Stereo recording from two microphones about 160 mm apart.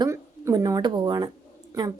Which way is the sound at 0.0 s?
20° right (ahead or behind).